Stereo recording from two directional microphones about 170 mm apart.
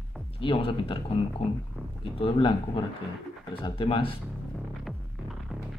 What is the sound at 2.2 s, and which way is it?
Speech, 30° left (ahead or behind).